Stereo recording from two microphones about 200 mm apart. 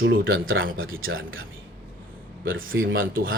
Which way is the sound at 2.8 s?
45° right (ahead or behind).